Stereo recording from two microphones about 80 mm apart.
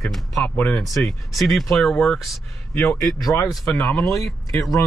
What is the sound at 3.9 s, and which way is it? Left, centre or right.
Speech, left.